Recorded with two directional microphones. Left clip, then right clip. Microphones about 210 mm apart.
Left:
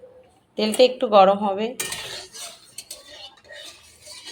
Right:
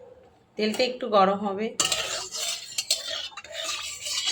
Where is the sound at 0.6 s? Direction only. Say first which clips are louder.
Left 8 dB; 25° left (ahead or behind).